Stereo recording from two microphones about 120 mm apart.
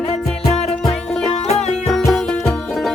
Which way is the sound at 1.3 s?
65° left (ahead or behind).